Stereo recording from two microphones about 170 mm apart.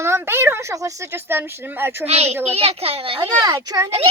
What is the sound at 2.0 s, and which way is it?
A child's voice, 40° right (ahead or behind).